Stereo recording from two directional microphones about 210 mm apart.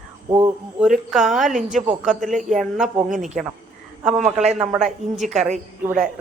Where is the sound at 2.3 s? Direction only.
35° right (ahead or behind).